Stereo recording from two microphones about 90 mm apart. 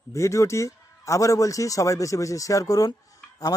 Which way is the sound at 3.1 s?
45° left (ahead or behind).